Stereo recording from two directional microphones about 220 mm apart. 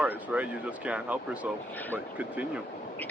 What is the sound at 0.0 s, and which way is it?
Speech, 5° right (ahead or behind).